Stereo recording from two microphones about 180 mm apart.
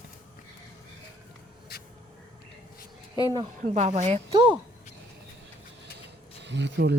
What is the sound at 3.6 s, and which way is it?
Speech, 40° right (ahead or behind).